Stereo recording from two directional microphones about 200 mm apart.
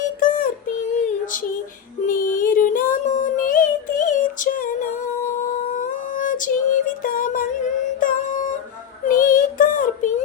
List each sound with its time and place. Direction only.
0.2 s child singing: 45° left (ahead or behind)
2.0 s music: 45° left (ahead or behind)
5.7 s female singing: 40° left (ahead or behind)
7.9 s music: 45° left (ahead or behind)
9.0 s child singing: 40° left (ahead or behind)